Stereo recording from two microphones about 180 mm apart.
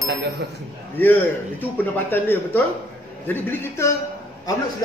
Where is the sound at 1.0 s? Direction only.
10° left (ahead or behind).